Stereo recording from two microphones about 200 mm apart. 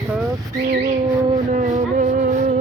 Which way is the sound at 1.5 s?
35° right (ahead or behind).